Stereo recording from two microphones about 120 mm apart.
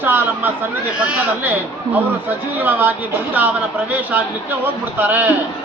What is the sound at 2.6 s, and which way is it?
Speech, 15° right (ahead or behind).